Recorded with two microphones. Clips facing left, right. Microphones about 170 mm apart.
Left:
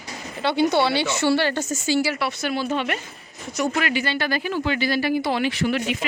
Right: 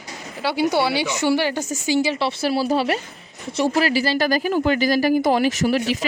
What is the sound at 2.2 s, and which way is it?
A woman's voice, 30° right (ahead or behind).